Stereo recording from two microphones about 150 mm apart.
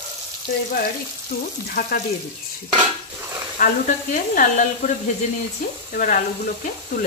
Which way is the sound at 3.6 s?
70° left (ahead or behind).